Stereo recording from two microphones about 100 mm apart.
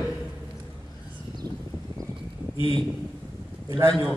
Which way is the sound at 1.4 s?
40° right (ahead or behind).